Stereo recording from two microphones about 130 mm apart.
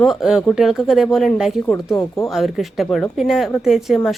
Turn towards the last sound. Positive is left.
turn(degrees=0)  # may be behind; listen again after turning